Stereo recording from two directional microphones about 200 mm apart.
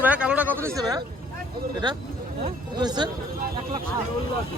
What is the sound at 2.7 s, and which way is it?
Speech, 20° right (ahead or behind).